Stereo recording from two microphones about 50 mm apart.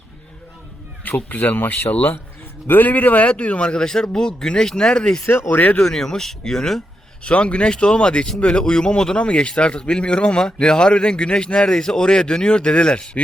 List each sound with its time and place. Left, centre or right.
1.3 s a man's voice: left; by 5.2 s centre
5.2 s speech: left
5.8 s a man's voice: centre
7.3 s speech: left